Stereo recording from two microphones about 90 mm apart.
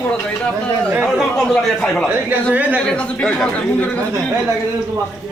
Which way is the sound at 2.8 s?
10° left (ahead or behind).